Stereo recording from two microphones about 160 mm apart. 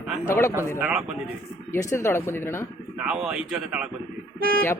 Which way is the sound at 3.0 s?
5° right (ahead or behind).